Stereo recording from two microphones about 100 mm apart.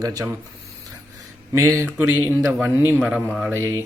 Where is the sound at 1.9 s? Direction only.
20° right (ahead or behind).